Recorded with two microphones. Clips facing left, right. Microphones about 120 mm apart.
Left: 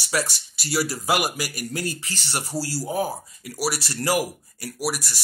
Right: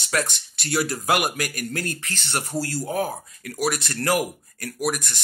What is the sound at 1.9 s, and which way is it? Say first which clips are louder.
Speech: even; 55° right (ahead or behind).